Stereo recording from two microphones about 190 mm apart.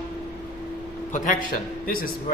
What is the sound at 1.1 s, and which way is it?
A man's voice, 45° left (ahead or behind).